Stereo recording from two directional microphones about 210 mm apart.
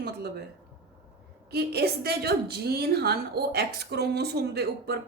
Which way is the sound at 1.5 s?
50° right (ahead or behind).